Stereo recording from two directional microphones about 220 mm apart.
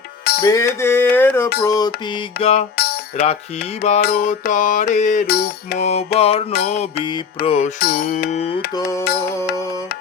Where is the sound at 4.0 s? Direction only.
45° left (ahead or behind).